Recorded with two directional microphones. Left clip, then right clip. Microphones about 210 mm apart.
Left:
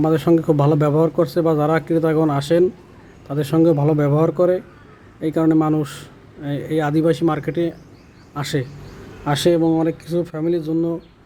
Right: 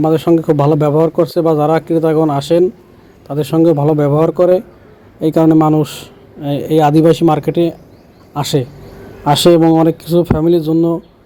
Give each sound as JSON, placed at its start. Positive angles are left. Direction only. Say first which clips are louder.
{"t": 0.0, "sound": "speech", "louder": "right 5 dB", "side_deg": -10}